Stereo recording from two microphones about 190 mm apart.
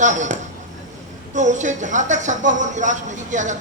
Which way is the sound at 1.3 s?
40° right (ahead or behind).